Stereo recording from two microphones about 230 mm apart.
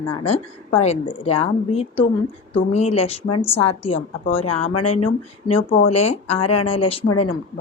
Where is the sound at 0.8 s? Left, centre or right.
Left.